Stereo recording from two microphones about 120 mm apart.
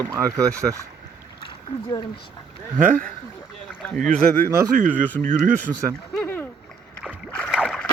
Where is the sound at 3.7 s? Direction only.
10° left (ahead or behind).